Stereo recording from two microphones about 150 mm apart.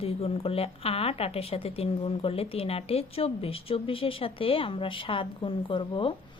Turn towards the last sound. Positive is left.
turn(degrees=35)  # may be behind; listen again after turning